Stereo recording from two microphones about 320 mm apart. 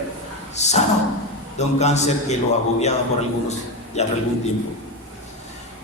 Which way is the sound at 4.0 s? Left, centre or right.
Left.